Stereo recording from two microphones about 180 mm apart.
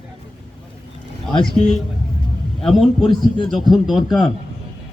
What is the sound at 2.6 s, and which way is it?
A man's voice, centre (ahead or behind).